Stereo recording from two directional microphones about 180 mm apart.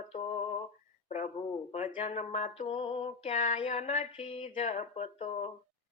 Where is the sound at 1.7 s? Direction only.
45° left (ahead or behind).